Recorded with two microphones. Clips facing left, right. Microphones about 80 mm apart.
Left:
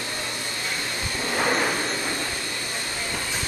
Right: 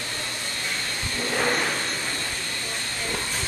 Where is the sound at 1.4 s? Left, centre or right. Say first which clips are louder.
Left 2 dB; centre.